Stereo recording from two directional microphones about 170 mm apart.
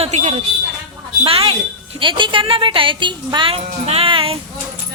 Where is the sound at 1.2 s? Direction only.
35° right (ahead or behind).